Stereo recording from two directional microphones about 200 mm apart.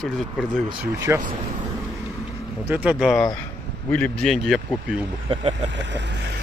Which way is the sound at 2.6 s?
5° right (ahead or behind).